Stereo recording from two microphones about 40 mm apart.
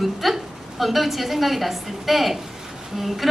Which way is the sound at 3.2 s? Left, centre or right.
Centre.